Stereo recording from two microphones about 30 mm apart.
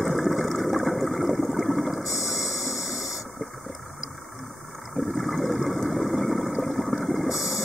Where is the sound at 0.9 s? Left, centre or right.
Centre.